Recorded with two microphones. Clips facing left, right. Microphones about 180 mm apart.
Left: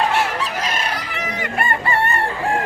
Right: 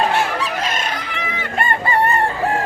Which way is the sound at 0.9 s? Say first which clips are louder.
Right 1 dB; 10° left (ahead or behind).